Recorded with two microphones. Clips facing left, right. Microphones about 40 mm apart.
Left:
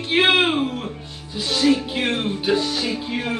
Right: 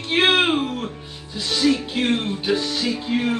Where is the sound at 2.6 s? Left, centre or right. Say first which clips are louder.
Left 1 dB; left.